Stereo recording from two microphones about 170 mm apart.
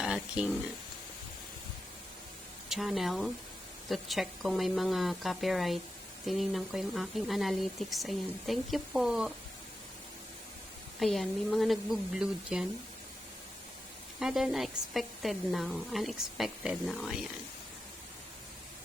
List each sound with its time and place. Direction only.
0.0 s speech: 5° right (ahead or behind)
2.6 s speech: centre (ahead or behind)
11.0 s speech: centre (ahead or behind)
14.2 s speech: 5° right (ahead or behind)